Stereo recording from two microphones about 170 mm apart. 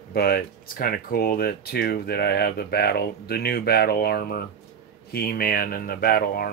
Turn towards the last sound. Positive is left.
turn(degrees=60)  # may be behind; listen again after turning